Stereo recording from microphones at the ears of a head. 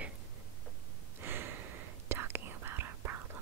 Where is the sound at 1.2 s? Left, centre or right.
Right.